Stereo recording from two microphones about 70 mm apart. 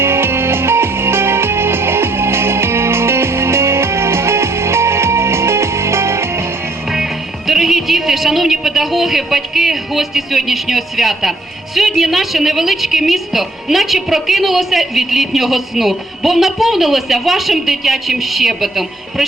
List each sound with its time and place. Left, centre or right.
0.0 s music: right
6.9 s speech: centre